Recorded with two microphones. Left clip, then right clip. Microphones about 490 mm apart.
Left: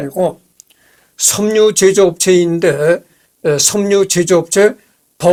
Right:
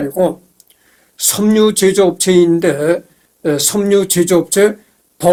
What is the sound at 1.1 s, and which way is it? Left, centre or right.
Speech, left.